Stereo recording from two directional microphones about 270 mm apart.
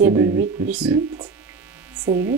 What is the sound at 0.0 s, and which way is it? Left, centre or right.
Speech, centre.